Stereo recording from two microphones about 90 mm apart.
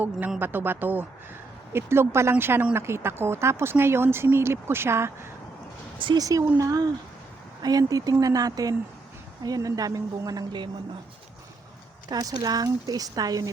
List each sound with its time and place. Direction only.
0.3 s speech: 20° right (ahead or behind)
6.1 s speech: 40° right (ahead or behind)
12.0 s speech: 50° right (ahead or behind)